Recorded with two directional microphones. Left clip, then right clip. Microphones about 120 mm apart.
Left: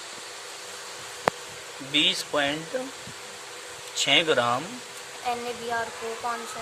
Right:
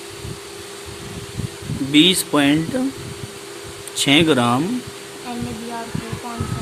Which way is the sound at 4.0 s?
20° right (ahead or behind).